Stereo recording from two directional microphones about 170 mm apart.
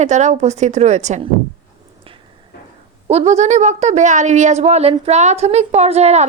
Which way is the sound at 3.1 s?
40° right (ahead or behind).